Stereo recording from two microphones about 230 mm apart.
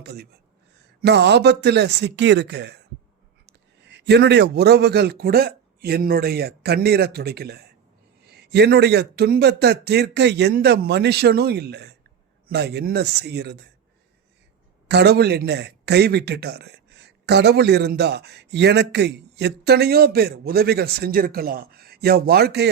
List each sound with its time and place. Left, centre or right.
0.0 s a man's voice: right
14.8 s speech: right